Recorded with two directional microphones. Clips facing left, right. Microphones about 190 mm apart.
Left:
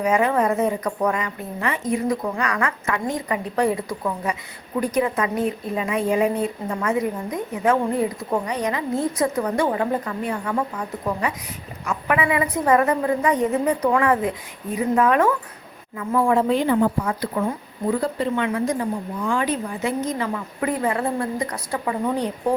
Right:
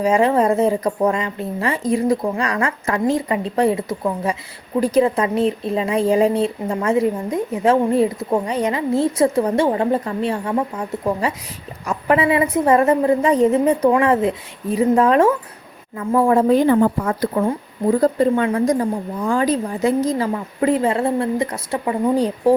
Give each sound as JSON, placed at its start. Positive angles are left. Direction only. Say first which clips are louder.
{"t": 0.0, "sound": "a woman's voice", "louder": "right 4 dB", "side_deg": -30}